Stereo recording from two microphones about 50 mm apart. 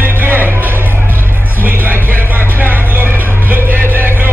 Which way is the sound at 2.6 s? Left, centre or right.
Right.